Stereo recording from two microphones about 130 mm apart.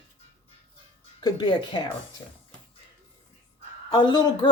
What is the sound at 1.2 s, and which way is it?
Speech, 35° left (ahead or behind).